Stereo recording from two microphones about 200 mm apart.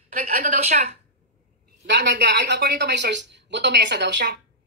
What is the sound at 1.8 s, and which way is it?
A woman's voice, 60° right (ahead or behind).